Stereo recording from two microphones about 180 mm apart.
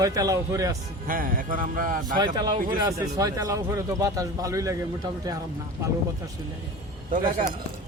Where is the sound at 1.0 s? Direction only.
50° right (ahead or behind).